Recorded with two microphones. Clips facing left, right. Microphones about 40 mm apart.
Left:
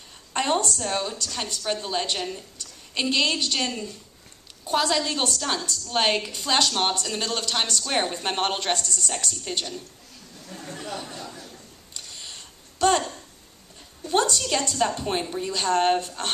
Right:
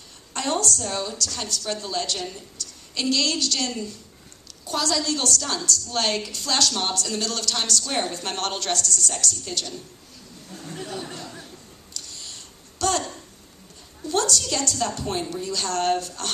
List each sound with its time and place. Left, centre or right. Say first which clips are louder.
0.3 s a woman's voice: left 1 dB; left
10.5 s chatter: even; left
12.0 s a sound: even; left
14.1 s a woman's voice: left 1 dB; left